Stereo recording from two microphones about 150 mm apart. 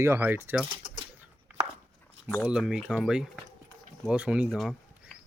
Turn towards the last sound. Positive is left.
turn(degrees=-5)  # may be behind; listen again after turning